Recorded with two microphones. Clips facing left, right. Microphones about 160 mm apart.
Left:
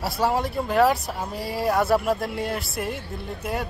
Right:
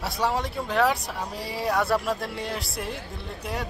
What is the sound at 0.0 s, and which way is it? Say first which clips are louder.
Speech: left 3 dB; centre (ahead or behind).